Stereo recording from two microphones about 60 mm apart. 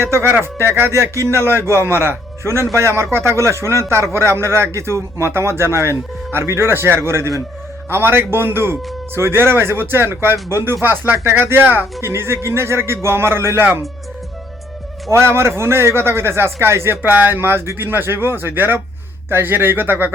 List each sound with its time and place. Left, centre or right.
0.1 s a man's voice: right
11.9 s a man's voice: right
13.6 s a man's voice: right
15.1 s a man's voice: right